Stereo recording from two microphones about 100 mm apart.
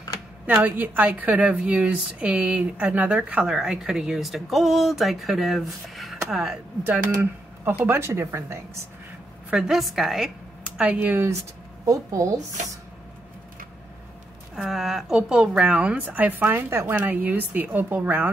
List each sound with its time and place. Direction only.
0.6 s a woman's voice: 20° right (ahead or behind); by 6.1 s centre (ahead or behind)
6.8 s speech: 20° right (ahead or behind)
9.5 s a woman's voice: 5° right (ahead or behind); by 11.3 s 20° right (ahead or behind)
11.8 s a woman's voice: 35° right (ahead or behind)
14.5 s a woman's voice: 5° right (ahead or behind)